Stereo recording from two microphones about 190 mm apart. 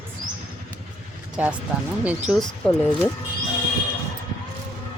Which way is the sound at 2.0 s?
5° right (ahead or behind).